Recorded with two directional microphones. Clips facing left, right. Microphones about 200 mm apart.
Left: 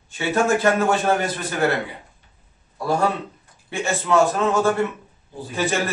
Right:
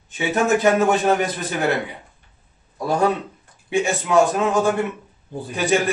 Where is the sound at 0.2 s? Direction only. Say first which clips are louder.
Right 1 dB; 20° right (ahead or behind).